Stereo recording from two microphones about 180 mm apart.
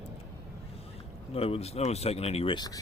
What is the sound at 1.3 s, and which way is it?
Speech, 35° left (ahead or behind).